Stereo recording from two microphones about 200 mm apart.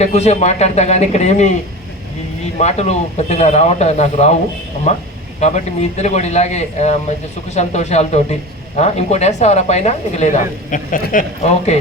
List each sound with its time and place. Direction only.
0.0 s a man's voice: 35° left (ahead or behind)
2.6 s a man's voice: 35° left (ahead or behind)